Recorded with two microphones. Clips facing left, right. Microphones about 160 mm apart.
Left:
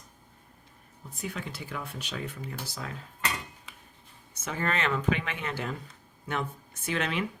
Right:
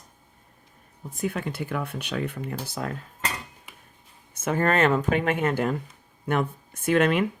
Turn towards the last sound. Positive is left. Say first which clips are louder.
# right 10 dB
turn(degrees=-50)  # may be behind; listen again after turning